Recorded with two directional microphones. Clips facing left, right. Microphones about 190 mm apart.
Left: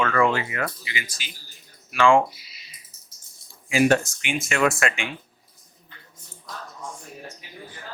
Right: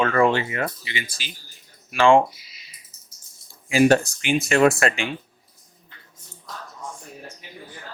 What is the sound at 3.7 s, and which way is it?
Speech, 35° right (ahead or behind).